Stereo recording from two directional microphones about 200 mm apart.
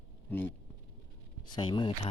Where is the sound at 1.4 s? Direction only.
20° left (ahead or behind).